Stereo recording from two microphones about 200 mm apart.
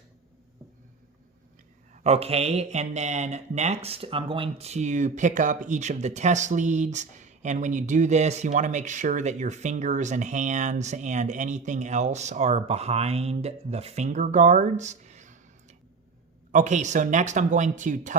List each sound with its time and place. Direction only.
2.0 s speech: 30° right (ahead or behind)
16.5 s speech: 40° right (ahead or behind)